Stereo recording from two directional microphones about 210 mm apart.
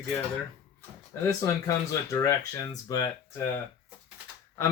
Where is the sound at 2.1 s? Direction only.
15° left (ahead or behind).